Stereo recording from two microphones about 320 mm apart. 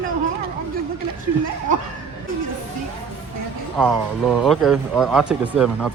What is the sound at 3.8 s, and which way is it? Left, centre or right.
Speech, centre.